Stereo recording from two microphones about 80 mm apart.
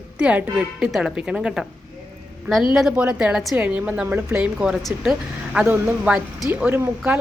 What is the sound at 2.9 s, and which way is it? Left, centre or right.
A woman's voice, centre.